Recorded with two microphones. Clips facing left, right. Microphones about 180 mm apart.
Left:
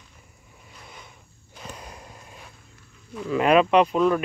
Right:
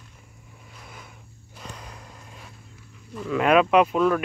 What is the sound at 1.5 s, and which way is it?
Snort, 10° left (ahead or behind).